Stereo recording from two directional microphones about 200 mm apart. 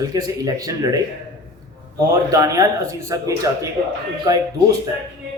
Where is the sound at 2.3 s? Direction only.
15° right (ahead or behind).